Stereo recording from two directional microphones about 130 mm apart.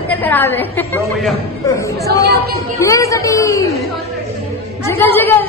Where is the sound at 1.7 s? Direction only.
25° left (ahead or behind).